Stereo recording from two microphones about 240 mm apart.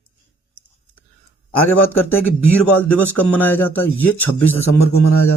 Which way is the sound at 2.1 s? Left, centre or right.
Centre.